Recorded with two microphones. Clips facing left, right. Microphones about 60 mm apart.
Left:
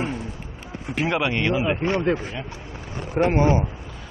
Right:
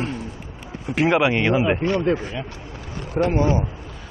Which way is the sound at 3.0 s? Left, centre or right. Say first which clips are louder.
Left 1 dB; left.